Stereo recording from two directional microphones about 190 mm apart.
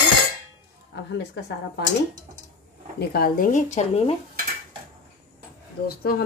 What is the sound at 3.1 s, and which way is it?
A woman's voice, 50° left (ahead or behind).